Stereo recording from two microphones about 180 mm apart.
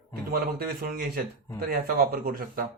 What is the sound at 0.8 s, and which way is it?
Speech, 55° right (ahead or behind).